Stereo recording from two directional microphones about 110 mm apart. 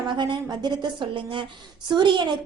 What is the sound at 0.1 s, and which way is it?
A woman's voice, 45° right (ahead or behind).